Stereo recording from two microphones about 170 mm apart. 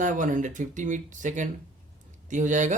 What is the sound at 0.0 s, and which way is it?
Speech, 50° right (ahead or behind).